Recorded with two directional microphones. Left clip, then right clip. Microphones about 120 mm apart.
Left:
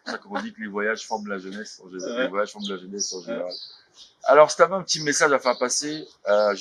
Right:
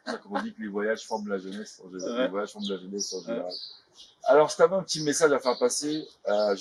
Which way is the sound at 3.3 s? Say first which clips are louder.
Left 2 dB; centre (ahead or behind).